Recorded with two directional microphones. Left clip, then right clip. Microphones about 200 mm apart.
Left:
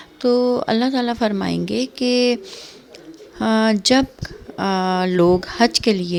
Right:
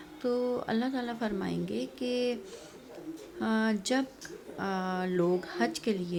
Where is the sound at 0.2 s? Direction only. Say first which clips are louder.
Left 14 dB; 40° left (ahead or behind).